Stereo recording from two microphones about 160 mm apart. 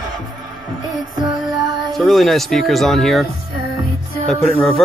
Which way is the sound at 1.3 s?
25° right (ahead or behind).